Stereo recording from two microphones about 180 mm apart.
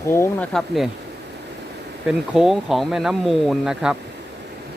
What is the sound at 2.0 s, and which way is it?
Speech, 5° right (ahead or behind).